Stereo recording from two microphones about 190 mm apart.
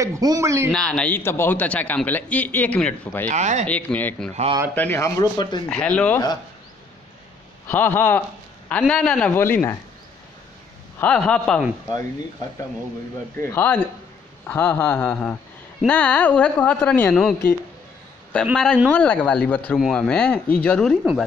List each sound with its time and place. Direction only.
0.0 s speech: 20° right (ahead or behind)
0.7 s a man's voice: 5° left (ahead or behind)
3.3 s speech: 40° right (ahead or behind)
3.6 s a man's voice: 10° left (ahead or behind)
5.7 s speech: 5° left (ahead or behind)
7.6 s a man's voice: 10° left (ahead or behind)
11.0 s speech: 5° left (ahead or behind)
13.4 s a man's voice: 10° left (ahead or behind)